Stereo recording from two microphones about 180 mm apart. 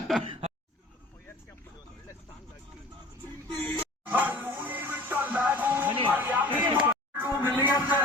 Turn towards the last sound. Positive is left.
turn(degrees=20)  # may be behind; listen again after turning